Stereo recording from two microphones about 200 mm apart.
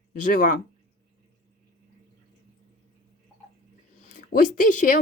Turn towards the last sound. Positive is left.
turn(degrees=40)  # may be behind; listen again after turning